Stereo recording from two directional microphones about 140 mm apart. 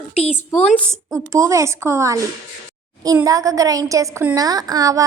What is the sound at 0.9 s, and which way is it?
A woman's voice, 25° right (ahead or behind).